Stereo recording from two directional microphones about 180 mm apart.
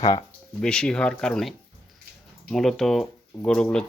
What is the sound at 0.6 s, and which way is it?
Speech, 5° left (ahead or behind).